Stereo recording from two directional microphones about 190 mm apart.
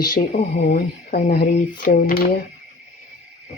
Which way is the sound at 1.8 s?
40° left (ahead or behind).